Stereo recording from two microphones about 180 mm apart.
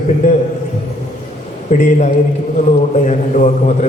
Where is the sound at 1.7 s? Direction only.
45° left (ahead or behind).